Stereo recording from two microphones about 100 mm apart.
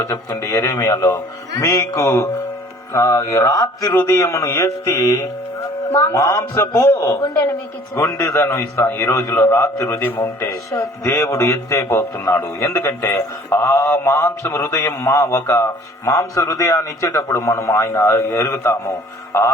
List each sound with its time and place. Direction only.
0.0 s a man's voice: 30° left (ahead or behind)